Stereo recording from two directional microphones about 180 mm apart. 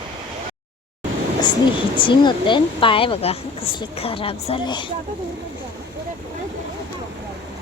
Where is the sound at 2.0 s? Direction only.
25° left (ahead or behind).